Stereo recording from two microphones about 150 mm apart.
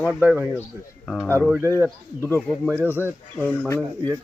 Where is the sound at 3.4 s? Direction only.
10° left (ahead or behind).